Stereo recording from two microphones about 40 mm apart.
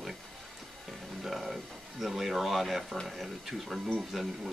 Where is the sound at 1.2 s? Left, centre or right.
Centre.